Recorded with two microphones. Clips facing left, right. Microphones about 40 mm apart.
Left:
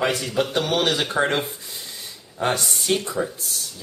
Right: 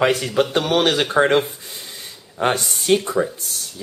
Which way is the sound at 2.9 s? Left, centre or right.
Right.